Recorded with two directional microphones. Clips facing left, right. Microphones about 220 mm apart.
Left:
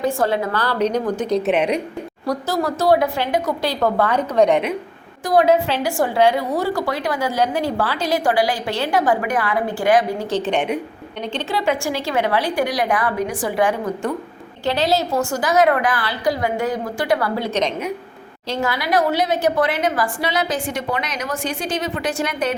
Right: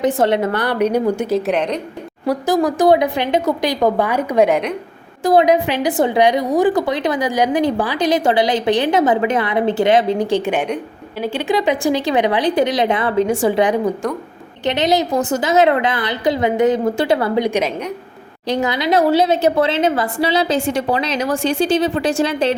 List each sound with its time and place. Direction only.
0.0 s a woman's voice: 20° right (ahead or behind)
1.4 s speech: 5° left (ahead or behind)
2.2 s speech: 10° right (ahead or behind)
5.2 s a woman's voice: 25° right (ahead or behind)
5.5 s a woman's voice: 15° right (ahead or behind)